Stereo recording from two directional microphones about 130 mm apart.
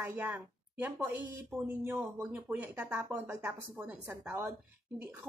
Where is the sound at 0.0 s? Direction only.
15° right (ahead or behind).